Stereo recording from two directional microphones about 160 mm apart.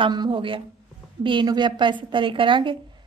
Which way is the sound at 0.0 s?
30° right (ahead or behind).